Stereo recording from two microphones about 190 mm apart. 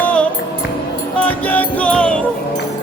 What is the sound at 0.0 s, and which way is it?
Music, 5° left (ahead or behind).